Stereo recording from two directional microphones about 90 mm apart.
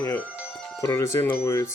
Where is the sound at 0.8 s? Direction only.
30° left (ahead or behind).